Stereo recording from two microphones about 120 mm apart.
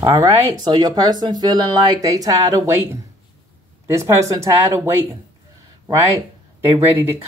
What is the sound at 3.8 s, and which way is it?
Speech, 25° right (ahead or behind).